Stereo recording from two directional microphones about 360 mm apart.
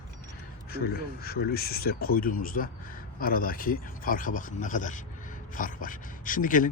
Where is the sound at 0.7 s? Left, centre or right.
Left.